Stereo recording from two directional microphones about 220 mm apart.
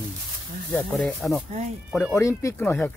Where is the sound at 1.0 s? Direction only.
Centre (ahead or behind).